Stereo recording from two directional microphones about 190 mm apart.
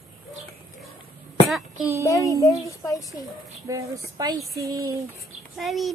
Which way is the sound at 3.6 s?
20° right (ahead or behind).